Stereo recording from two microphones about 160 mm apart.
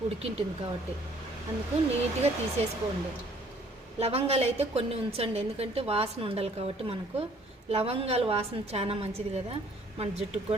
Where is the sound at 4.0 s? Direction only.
40° right (ahead or behind).